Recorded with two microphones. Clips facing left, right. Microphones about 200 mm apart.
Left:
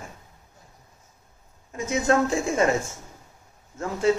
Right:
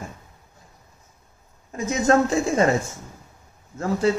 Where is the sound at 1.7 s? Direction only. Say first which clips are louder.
Right 3 dB; 40° right (ahead or behind).